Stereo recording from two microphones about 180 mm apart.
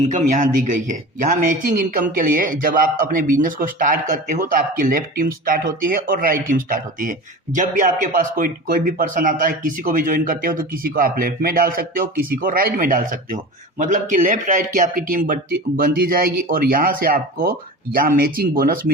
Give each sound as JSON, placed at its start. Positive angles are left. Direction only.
{"t": 0.0, "sound": "a man's voice", "side_deg": -45}